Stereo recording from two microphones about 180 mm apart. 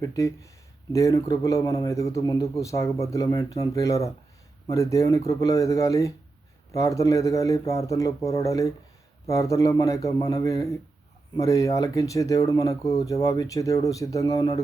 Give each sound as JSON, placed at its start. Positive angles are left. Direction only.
{"t": 0.0, "sound": "a man's voice", "side_deg": 20}